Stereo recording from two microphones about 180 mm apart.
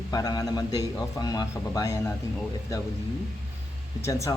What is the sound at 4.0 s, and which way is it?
Speech, 15° left (ahead or behind).